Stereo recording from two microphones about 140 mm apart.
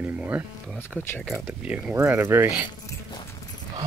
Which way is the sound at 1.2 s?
5° right (ahead or behind).